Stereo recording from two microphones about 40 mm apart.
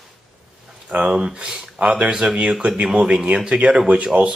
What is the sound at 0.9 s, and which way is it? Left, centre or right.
Speech, right.